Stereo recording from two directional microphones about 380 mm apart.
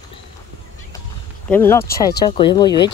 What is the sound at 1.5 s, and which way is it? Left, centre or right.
Speech, centre.